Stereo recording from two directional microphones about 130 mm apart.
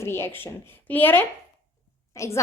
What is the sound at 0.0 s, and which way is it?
A woman's voice, 20° left (ahead or behind).